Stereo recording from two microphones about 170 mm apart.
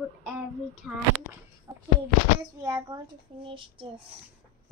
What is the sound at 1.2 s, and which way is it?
Speech, 15° left (ahead or behind).